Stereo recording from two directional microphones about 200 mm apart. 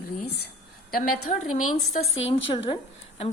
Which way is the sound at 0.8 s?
45° left (ahead or behind).